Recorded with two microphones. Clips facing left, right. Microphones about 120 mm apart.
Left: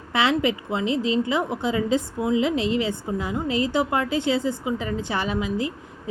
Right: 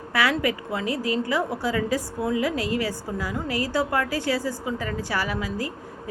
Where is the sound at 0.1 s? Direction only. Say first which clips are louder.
Left 2 dB; 20° left (ahead or behind).